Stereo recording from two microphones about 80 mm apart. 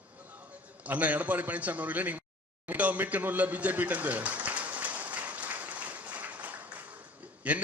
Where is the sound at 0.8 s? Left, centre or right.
Centre.